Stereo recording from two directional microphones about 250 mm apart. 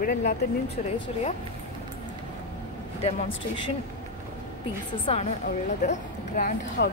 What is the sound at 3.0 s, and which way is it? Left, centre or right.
Speech, centre.